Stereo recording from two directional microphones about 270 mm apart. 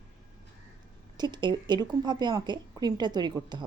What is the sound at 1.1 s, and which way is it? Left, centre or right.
A woman's voice, centre.